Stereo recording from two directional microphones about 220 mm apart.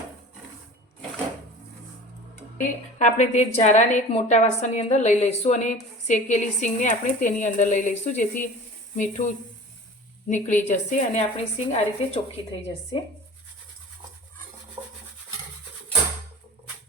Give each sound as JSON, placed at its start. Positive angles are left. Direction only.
{"t": 2.6, "sound": "a woman's voice", "side_deg": 30}